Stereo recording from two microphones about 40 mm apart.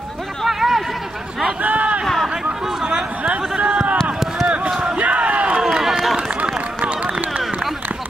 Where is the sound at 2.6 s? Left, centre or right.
Centre.